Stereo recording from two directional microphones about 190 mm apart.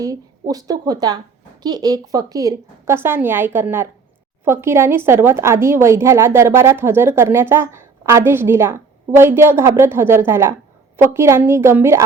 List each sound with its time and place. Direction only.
0.0 s a woman's voice: 20° right (ahead or behind)